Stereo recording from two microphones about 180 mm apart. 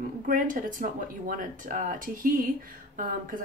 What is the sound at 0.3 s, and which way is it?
Speech, 50° right (ahead or behind).